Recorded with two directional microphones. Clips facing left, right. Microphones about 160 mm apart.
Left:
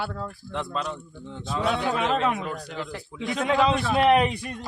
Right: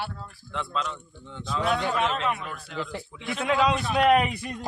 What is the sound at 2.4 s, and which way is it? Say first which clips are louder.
Speech: left 5 dB; 40° left (ahead or behind).